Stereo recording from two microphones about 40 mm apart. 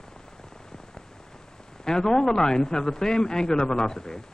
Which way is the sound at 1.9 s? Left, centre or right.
Centre.